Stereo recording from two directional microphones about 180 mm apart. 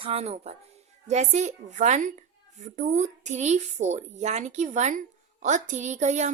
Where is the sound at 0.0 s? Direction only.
35° right (ahead or behind).